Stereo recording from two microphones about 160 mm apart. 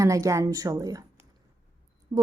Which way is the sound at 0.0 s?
20° right (ahead or behind).